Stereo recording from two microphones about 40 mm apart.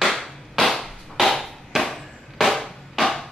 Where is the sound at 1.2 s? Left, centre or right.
Centre.